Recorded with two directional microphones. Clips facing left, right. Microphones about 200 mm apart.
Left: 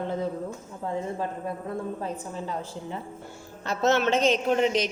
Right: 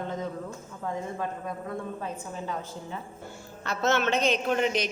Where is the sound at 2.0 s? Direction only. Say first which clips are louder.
Left 2 dB; 30° left (ahead or behind).